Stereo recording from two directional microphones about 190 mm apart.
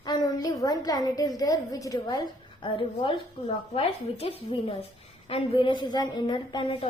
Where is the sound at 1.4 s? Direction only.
20° left (ahead or behind).